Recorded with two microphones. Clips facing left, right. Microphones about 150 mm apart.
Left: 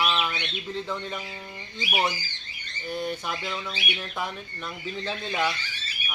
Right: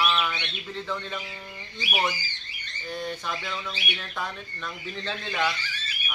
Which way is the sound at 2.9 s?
10° left (ahead or behind).